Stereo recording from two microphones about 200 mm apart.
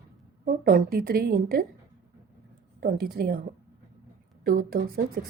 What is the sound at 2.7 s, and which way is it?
Speech, 50° right (ahead or behind).